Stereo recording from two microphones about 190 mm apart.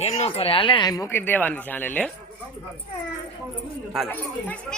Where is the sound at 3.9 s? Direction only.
5° left (ahead or behind).